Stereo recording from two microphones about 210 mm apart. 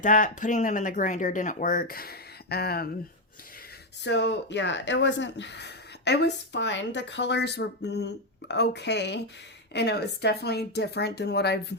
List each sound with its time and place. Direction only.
0.0 s speech: 40° left (ahead or behind)
4.0 s speech: 55° left (ahead or behind)